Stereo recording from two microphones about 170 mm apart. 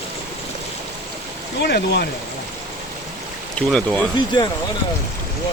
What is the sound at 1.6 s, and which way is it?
Speech, 75° left (ahead or behind).